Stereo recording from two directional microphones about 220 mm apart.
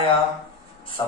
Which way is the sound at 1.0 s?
20° left (ahead or behind).